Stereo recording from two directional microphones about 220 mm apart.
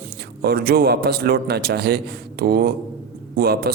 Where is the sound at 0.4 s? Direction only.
45° right (ahead or behind).